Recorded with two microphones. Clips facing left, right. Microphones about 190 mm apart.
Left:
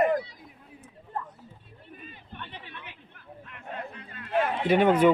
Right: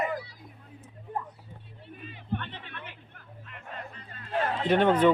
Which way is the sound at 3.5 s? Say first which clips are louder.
Left 4 dB; 60° left (ahead or behind).